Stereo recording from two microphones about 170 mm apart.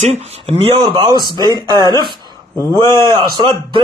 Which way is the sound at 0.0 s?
40° right (ahead or behind).